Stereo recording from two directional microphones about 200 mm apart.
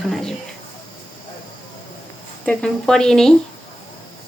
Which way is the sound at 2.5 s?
5° left (ahead or behind).